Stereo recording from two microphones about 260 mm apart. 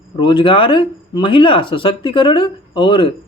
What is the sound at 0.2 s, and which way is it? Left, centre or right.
Speech, centre.